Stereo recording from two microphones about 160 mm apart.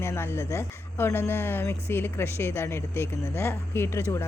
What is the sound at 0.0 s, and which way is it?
Speech, 15° left (ahead or behind).